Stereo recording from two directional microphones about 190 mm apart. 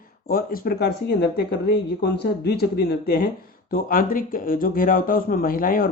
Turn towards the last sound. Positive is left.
turn(degrees=50)  # may be behind; listen again after turning